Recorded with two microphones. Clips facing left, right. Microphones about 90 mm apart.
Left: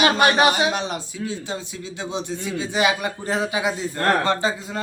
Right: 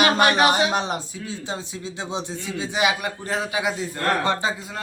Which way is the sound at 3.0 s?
Centre (ahead or behind).